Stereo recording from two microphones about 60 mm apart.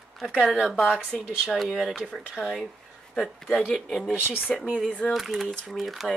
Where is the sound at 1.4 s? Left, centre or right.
Centre.